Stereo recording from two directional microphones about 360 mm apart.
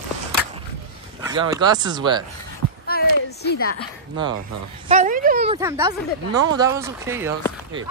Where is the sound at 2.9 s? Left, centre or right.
Left.